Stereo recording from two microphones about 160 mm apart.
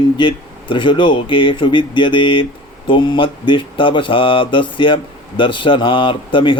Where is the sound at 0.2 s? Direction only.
30° left (ahead or behind).